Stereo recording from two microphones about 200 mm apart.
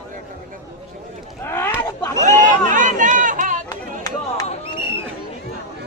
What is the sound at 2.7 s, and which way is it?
Chatter, 40° right (ahead or behind).